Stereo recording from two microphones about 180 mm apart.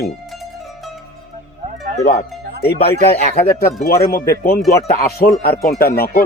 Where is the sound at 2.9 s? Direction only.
60° left (ahead or behind).